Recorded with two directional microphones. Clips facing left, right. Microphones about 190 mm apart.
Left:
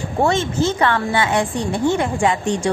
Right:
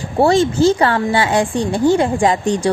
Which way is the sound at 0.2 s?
35° right (ahead or behind).